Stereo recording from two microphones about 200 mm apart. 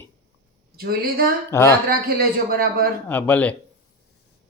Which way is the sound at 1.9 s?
50° right (ahead or behind).